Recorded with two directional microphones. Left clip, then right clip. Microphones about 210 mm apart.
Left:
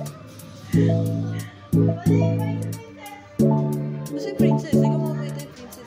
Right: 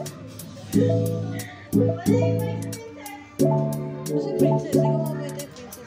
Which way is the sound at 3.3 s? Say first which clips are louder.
Even; centre (ahead or behind).